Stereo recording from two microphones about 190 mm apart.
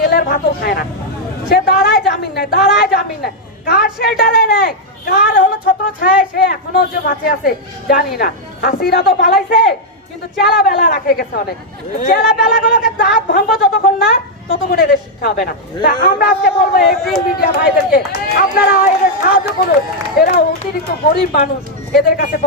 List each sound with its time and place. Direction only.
0.0 s speech: 55° left (ahead or behind)
1.5 s a sound: 55° left (ahead or behind)
4.2 s speech: 50° left (ahead or behind)
17.0 s speech: centre (ahead or behind)
17.4 s speech: 55° left (ahead or behind)
21.9 s speech: 55° left (ahead or behind)